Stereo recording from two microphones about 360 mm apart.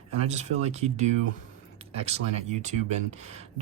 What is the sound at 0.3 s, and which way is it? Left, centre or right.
Speech, centre.